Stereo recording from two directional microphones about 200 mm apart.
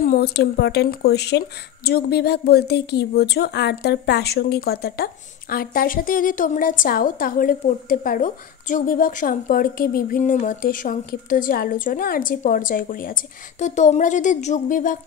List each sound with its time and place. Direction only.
0.0 s speech: 45° left (ahead or behind)